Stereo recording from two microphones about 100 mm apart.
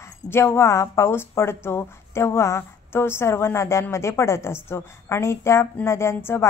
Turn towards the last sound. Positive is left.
turn(degrees=25)  # may be behind; listen again after turning